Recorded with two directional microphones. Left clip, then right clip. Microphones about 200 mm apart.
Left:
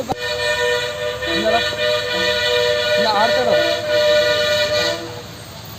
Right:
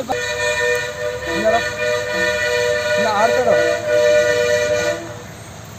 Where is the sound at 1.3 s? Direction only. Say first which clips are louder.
Right 1 dB; 20° right (ahead or behind).